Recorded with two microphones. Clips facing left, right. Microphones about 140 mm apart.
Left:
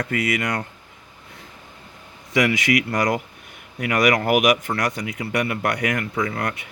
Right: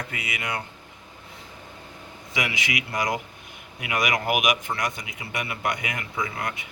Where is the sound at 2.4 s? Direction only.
50° left (ahead or behind).